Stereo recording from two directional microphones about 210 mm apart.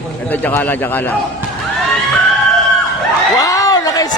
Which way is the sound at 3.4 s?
15° left (ahead or behind).